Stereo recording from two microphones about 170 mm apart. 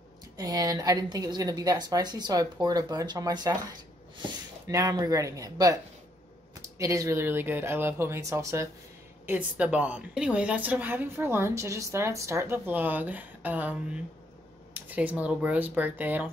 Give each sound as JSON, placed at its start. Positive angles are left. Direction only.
{"t": 0.4, "sound": "a woman's voice", "side_deg": -20}
{"t": 4.6, "sound": "a woman's voice", "side_deg": -20}